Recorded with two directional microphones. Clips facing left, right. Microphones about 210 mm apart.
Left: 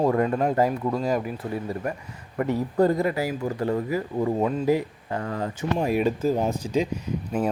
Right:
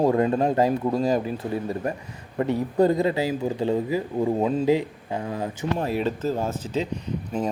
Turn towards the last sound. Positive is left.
turn(degrees=10)  # may be behind; listen again after turning